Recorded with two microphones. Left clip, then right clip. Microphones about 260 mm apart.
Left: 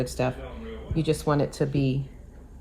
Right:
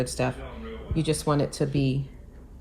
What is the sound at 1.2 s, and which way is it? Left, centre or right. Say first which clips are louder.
Speech: left 1 dB; centre.